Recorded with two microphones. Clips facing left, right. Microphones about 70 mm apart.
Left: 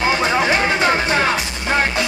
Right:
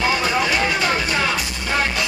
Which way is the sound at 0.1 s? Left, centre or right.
Left.